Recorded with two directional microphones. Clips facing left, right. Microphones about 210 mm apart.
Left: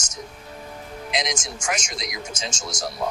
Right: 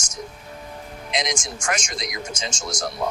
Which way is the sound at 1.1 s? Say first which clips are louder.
Right 1 dB; centre (ahead or behind).